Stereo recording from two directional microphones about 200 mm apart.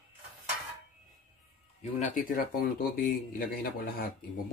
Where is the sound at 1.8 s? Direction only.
40° left (ahead or behind).